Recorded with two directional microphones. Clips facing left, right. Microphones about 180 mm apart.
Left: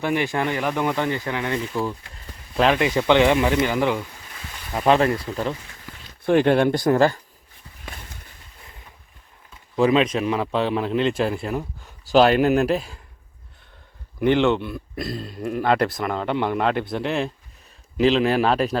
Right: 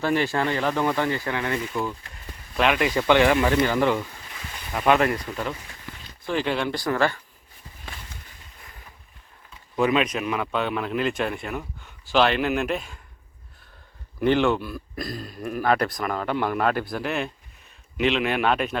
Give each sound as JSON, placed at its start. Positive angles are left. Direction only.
{"t": 0.0, "sound": "speech", "side_deg": 15}
{"t": 2.6, "sound": "speech", "side_deg": 35}
{"t": 2.8, "sound": "speech", "side_deg": 20}
{"t": 4.7, "sound": "speech", "side_deg": 30}
{"t": 6.2, "sound": "speech", "side_deg": 55}
{"t": 9.7, "sound": "speech", "side_deg": 30}
{"t": 14.2, "sound": "speech", "side_deg": 20}